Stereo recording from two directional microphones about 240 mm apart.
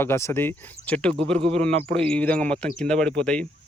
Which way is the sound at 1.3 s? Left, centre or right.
Right.